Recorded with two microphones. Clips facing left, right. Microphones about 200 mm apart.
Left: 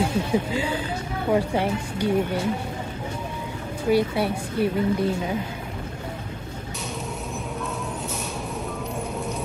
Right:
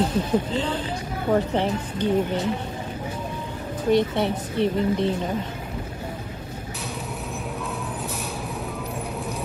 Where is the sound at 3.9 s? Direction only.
5° left (ahead or behind).